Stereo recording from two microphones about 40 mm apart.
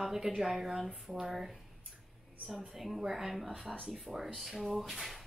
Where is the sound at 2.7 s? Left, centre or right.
Centre.